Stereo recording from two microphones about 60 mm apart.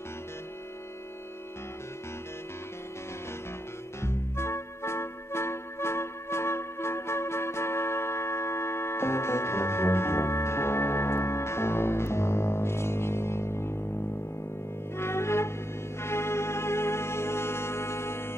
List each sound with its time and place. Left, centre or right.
4.0 s music: left
15.0 s music: left